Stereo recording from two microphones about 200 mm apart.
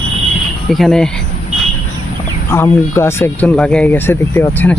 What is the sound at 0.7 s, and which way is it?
Speech, centre (ahead or behind).